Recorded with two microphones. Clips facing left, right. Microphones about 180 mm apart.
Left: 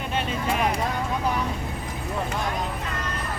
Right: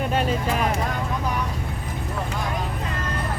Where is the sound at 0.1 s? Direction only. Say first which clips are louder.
Right 2 dB; 40° right (ahead or behind).